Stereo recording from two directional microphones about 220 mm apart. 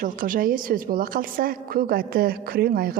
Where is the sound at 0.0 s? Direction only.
40° right (ahead or behind).